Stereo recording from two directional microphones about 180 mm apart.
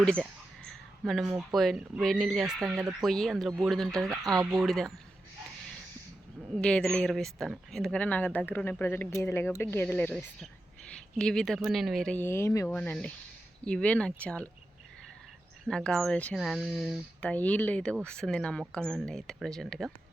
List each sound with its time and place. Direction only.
0.0 s a sound: 5° left (ahead or behind)
1.5 s speech: centre (ahead or behind)
4.1 s speech: 20° right (ahead or behind)
4.5 s speech: centre (ahead or behind)
6.6 s speech: 5° left (ahead or behind)
15.6 s speech: 5° left (ahead or behind)